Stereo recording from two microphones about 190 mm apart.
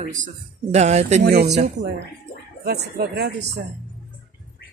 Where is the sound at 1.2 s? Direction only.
55° right (ahead or behind).